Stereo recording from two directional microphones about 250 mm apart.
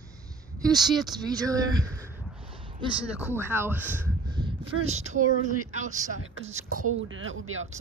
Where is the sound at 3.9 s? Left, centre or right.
Centre.